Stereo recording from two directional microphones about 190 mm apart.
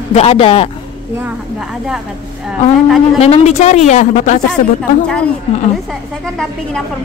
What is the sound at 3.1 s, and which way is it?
A woman's voice, 35° left (ahead or behind).